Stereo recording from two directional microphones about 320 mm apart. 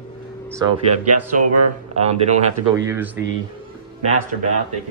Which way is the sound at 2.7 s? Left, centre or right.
Centre.